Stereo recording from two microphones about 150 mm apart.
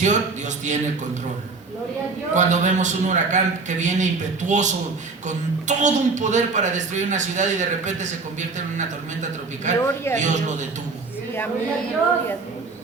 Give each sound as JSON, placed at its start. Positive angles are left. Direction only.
{"t": 0.0, "sound": "a man's voice", "side_deg": -55}
{"t": 2.3, "sound": "a man's voice", "side_deg": -55}
{"t": 9.7, "sound": "a man's voice", "side_deg": -55}